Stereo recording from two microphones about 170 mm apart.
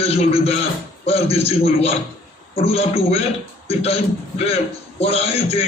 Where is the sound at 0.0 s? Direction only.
35° left (ahead or behind).